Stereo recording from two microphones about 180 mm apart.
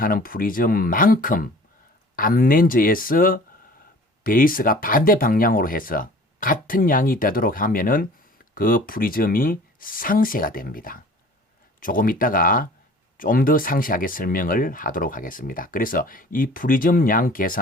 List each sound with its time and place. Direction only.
0.0 s speech: 50° left (ahead or behind)